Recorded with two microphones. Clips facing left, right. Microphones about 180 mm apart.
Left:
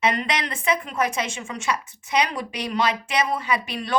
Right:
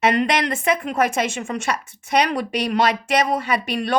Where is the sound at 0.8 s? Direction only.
65° right (ahead or behind).